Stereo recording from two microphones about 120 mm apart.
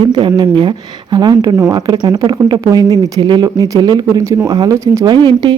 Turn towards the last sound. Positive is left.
turn(degrees=-40)  # may be behind; listen again after turning